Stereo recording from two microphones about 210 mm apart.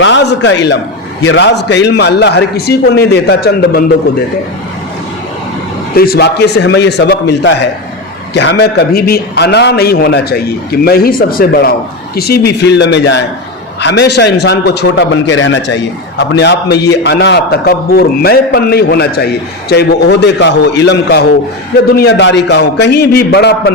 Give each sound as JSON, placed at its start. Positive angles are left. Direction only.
{"t": 0.0, "sound": "a man's voice", "side_deg": 60}
{"t": 6.0, "sound": "a man's voice", "side_deg": 50}